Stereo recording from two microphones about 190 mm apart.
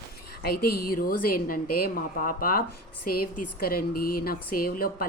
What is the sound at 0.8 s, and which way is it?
Speech, 50° left (ahead or behind).